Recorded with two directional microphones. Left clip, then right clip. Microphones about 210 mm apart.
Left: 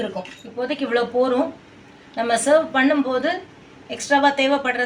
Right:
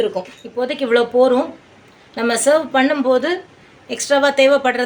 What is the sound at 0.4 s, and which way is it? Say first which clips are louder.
Speech: right 7 dB; 25° right (ahead or behind).